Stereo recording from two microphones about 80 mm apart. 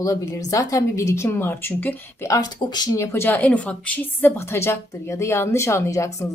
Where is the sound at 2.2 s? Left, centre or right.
Left.